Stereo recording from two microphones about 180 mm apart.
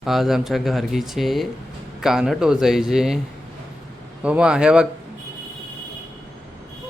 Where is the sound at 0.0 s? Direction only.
Centre (ahead or behind).